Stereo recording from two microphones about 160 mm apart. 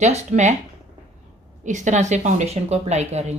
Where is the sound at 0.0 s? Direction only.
45° right (ahead or behind).